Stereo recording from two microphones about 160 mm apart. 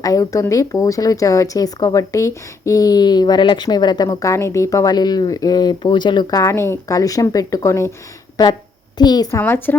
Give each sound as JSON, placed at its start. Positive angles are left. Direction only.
{"t": 0.0, "sound": "speech", "side_deg": 20}
{"t": 9.4, "sound": "speech", "side_deg": 10}